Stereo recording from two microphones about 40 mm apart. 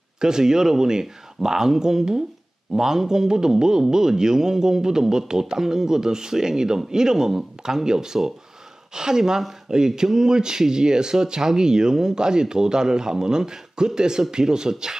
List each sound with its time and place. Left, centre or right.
0.2 s speech: centre